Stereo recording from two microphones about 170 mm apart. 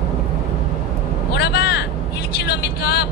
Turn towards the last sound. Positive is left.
turn(degrees=75)  # may be behind; listen again after turning